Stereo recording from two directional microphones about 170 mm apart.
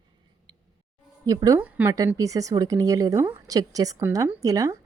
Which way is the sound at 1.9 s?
20° right (ahead or behind).